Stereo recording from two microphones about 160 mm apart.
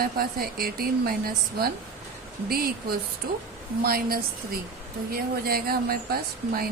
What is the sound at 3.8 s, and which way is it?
A woman's voice, 65° right (ahead or behind).